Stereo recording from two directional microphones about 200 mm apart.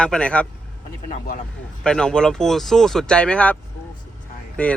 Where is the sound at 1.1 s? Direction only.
40° left (ahead or behind).